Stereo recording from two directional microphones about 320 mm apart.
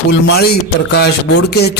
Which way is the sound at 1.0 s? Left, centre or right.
Left.